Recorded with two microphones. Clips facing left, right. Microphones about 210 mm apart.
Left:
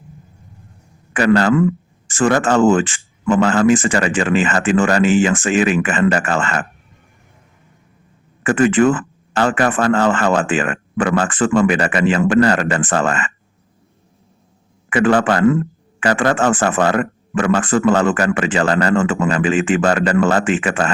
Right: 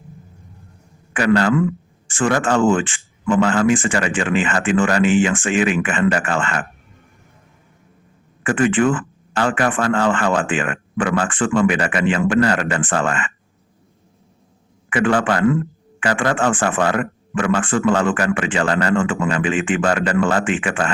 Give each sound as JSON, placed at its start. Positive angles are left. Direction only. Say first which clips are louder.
{"t": 1.1, "sound": "speech", "louder": "left 2 dB", "side_deg": 40}
{"t": 8.4, "sound": "speech", "louder": "left 3 dB", "side_deg": 40}
{"t": 14.8, "sound": "speech", "louder": "left 3 dB", "side_deg": 40}